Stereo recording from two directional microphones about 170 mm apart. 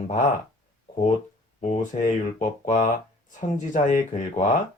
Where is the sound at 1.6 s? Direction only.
50° left (ahead or behind).